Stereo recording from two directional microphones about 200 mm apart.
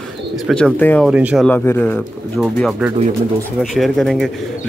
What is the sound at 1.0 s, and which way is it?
Speech, 5° right (ahead or behind).